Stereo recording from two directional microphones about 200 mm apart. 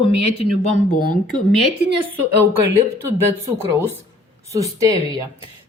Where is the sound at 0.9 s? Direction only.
45° left (ahead or behind).